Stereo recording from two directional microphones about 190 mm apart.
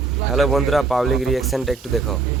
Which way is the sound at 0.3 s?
Centre (ahead or behind).